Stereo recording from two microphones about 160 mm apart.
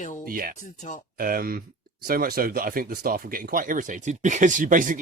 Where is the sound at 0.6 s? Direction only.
50° left (ahead or behind).